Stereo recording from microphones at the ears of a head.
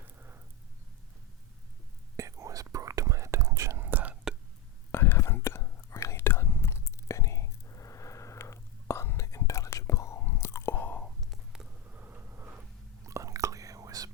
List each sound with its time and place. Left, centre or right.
2.1 s whispering: right
4.9 s whispering: left
8.9 s chewing: left
13.1 s whispering: right